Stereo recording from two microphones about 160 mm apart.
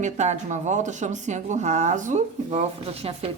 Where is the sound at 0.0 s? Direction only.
50° right (ahead or behind).